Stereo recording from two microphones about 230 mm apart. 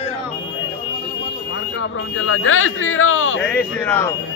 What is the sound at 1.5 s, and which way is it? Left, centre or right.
Speech, left.